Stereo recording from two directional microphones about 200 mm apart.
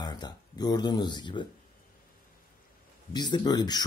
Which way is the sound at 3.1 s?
20° left (ahead or behind).